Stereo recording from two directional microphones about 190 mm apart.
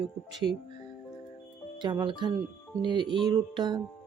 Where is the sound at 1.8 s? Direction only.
25° right (ahead or behind).